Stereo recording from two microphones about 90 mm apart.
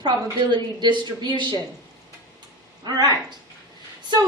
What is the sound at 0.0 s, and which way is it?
A woman's voice, 60° right (ahead or behind).